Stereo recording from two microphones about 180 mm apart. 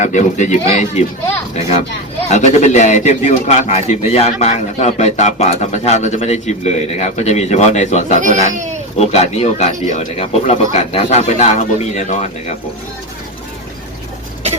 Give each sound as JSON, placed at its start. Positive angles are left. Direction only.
{"t": 0.0, "sound": "speech", "side_deg": 40}
{"t": 2.3, "sound": "speech", "side_deg": 40}
{"t": 8.2, "sound": "speech", "side_deg": -45}
{"t": 9.0, "sound": "speech", "side_deg": 35}